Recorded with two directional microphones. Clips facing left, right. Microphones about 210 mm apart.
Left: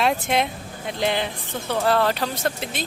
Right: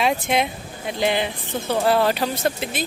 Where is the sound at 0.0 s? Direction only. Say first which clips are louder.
Right 1 dB; centre (ahead or behind).